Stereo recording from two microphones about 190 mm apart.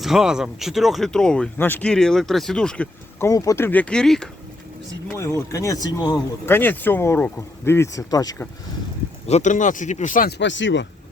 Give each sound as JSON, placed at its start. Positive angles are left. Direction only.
{"t": 0.0, "sound": "speech", "side_deg": 0}
{"t": 5.1, "sound": "speech", "side_deg": 15}
{"t": 9.2, "sound": "speech", "side_deg": 35}